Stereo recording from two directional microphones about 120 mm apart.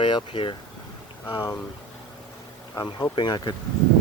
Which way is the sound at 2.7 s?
35° left (ahead or behind).